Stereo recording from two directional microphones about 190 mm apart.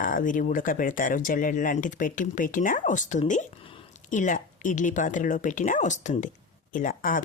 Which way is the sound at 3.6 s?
30° left (ahead or behind).